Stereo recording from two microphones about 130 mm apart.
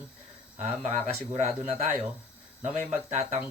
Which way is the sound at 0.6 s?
60° right (ahead or behind).